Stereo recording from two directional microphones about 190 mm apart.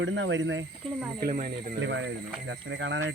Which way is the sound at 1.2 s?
45° right (ahead or behind).